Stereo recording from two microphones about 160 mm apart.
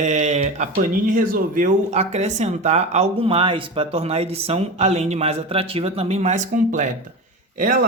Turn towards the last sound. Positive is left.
turn(degrees=-55)  # may be behind; listen again after turning